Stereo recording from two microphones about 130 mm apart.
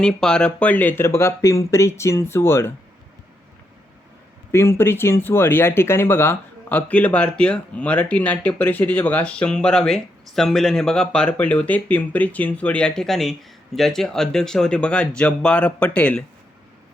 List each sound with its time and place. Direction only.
0.0 s speech: 5° left (ahead or behind)
4.5 s speech: 20° left (ahead or behind)